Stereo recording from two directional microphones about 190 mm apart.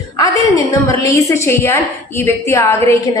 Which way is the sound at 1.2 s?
15° left (ahead or behind).